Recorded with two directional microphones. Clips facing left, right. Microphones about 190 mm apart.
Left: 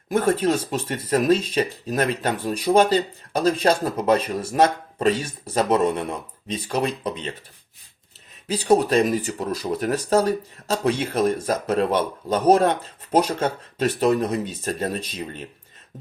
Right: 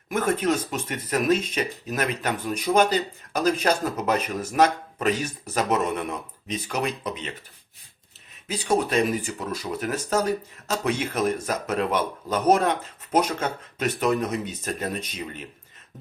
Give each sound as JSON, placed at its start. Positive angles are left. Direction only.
{"t": 0.1, "sound": "speech", "side_deg": 30}
{"t": 8.4, "sound": "speech", "side_deg": 35}